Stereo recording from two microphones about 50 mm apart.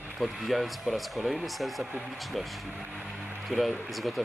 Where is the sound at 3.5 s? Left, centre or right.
Centre.